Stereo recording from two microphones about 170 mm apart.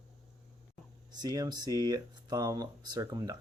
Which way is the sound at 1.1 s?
25° right (ahead or behind).